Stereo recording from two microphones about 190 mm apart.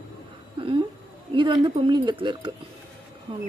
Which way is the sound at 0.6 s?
25° right (ahead or behind).